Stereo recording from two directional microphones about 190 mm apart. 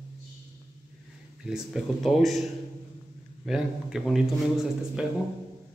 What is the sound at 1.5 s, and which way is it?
Speech, centre (ahead or behind).